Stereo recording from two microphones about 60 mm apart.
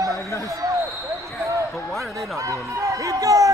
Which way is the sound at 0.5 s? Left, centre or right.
Right.